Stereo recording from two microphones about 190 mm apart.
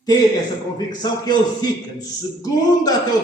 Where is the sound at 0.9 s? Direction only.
20° left (ahead or behind).